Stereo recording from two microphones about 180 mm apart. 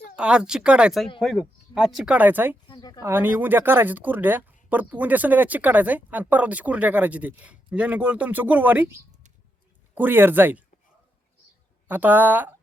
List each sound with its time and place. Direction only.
0.2 s speech: 5° right (ahead or behind)
2.6 s a sound: 25° left (ahead or behind)
3.0 s speech: 10° right (ahead or behind)
11.9 s speech: 10° right (ahead or behind)